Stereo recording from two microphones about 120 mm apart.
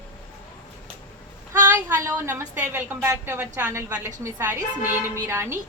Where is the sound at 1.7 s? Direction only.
25° right (ahead or behind).